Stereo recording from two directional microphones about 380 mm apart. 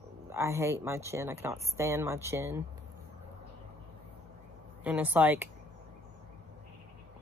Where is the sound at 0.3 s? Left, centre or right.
Centre.